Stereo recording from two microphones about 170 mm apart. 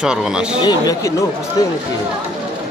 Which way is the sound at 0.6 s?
20° left (ahead or behind).